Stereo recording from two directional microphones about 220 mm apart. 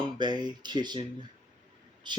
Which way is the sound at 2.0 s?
20° right (ahead or behind).